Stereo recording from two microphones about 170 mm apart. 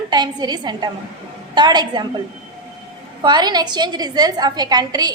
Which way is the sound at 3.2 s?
25° right (ahead or behind).